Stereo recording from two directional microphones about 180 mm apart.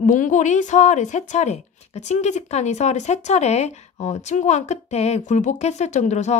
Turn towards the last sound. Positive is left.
turn(degrees=40)  # may be behind; listen again after turning